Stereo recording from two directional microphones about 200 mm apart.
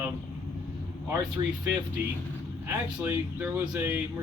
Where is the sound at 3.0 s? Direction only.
10° right (ahead or behind).